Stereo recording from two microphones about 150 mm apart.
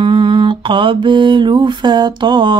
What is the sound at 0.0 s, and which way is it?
Mantra, 35° right (ahead or behind).